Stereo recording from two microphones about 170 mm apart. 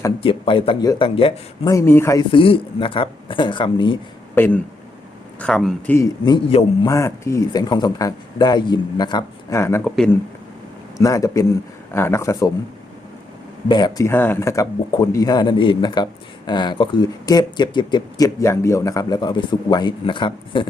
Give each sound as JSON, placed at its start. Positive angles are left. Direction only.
{"t": 0.2, "sound": "speech", "side_deg": 30}
{"t": 1.7, "sound": "speech", "side_deg": 15}
{"t": 2.3, "sound": "speech", "side_deg": 30}
{"t": 4.4, "sound": "speech", "side_deg": 10}
{"t": 6.2, "sound": "speech", "side_deg": 30}
{"t": 6.8, "sound": "speech", "side_deg": 15}
{"t": 9.8, "sound": "speech", "side_deg": 5}
{"t": 10.9, "sound": "speech", "side_deg": 20}
{"t": 13.7, "sound": "speech", "side_deg": 25}